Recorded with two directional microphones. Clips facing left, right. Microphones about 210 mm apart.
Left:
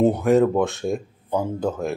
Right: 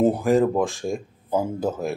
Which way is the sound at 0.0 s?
Centre (ahead or behind).